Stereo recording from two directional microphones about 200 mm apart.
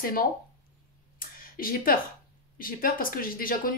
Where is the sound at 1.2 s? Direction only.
45° left (ahead or behind).